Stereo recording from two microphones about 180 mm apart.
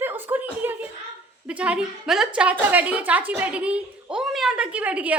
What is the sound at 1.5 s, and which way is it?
A woman's voice, 5° right (ahead or behind).